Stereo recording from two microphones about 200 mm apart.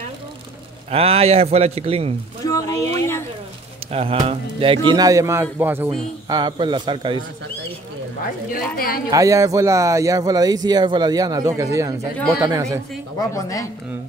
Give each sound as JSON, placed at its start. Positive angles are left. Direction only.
{"t": 0.8, "sound": "speech", "side_deg": -30}
{"t": 2.4, "sound": "a sound", "side_deg": 15}
{"t": 3.9, "sound": "a man's voice", "side_deg": -30}
{"t": 8.7, "sound": "speech", "side_deg": 50}
{"t": 9.1, "sound": "speech", "side_deg": -15}
{"t": 13.3, "sound": "speech", "side_deg": 15}